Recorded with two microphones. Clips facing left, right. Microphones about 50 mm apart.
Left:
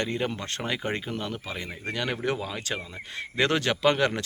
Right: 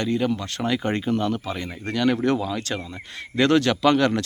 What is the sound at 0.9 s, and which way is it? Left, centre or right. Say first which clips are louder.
Speech: right 8 dB; centre.